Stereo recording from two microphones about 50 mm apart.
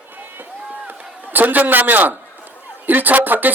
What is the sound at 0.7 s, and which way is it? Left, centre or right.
Run, right.